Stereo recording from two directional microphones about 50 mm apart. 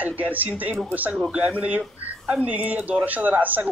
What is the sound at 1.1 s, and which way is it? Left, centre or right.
Speech, centre.